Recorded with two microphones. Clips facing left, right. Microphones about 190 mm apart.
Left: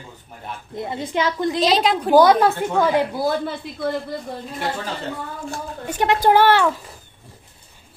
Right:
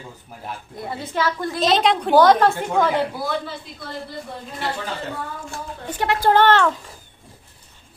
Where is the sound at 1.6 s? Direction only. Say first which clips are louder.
Right 1 dB; centre (ahead or behind).